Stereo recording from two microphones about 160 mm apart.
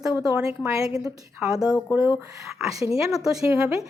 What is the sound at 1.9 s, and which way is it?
A woman's voice, 10° right (ahead or behind).